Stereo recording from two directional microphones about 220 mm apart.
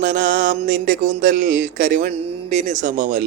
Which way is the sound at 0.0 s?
35° right (ahead or behind).